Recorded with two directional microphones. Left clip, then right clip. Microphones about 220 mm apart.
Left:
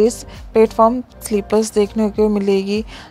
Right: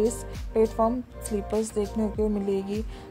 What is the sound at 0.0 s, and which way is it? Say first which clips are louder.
Speech: left 10 dB; 20° left (ahead or behind).